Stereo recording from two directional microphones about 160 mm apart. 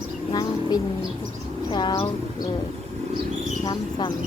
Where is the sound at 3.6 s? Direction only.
25° left (ahead or behind).